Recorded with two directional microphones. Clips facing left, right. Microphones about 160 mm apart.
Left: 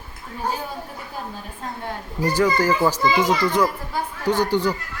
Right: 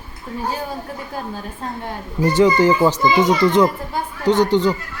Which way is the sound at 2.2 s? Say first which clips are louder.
Right 5 dB; 20° right (ahead or behind).